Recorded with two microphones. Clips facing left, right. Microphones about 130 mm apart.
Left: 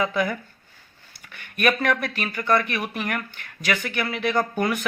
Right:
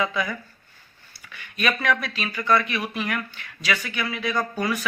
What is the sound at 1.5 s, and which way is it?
Speech, 55° left (ahead or behind).